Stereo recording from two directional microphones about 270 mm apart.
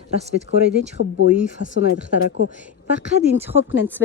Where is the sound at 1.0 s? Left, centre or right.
Left.